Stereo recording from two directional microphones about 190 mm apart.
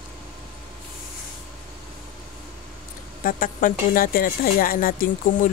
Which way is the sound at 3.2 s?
45° left (ahead or behind).